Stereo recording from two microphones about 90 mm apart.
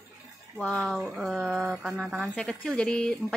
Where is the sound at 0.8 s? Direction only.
Centre (ahead or behind).